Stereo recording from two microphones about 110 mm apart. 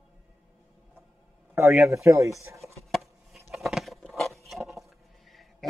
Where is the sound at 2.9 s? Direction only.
Centre (ahead or behind).